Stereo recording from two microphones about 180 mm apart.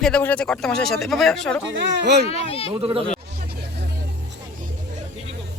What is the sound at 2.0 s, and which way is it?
Speech, 70° right (ahead or behind).